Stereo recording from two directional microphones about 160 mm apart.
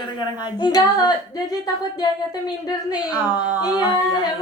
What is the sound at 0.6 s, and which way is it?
Speech, 25° left (ahead or behind).